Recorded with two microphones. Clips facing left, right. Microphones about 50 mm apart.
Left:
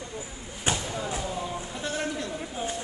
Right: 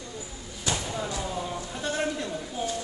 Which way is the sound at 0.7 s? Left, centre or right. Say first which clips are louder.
Left 2 dB; left.